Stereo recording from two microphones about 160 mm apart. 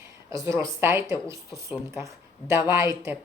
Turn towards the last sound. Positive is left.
turn(degrees=-20)  # may be behind; listen again after turning